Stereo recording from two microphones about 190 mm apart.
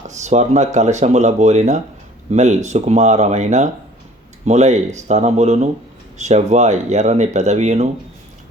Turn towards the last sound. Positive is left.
turn(degrees=-35)  # may be behind; listen again after turning